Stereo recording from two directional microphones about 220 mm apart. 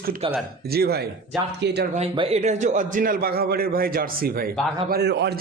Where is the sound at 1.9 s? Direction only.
25° right (ahead or behind).